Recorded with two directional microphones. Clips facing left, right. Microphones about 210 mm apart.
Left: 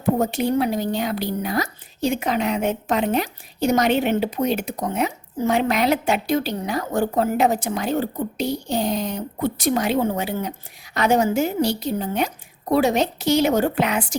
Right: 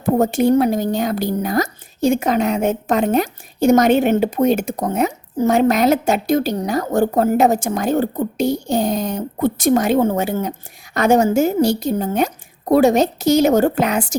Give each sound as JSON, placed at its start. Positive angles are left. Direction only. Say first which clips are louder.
{"t": 0.0, "sound": "speech", "louder": "right 5 dB", "side_deg": -50}